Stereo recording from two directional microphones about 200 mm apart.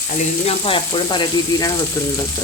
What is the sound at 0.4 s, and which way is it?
Frying, 25° left (ahead or behind).